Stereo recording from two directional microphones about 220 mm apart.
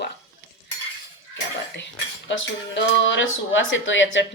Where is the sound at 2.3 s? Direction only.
55° left (ahead or behind).